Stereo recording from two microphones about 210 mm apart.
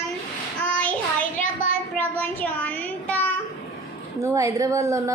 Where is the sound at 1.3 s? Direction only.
40° left (ahead or behind).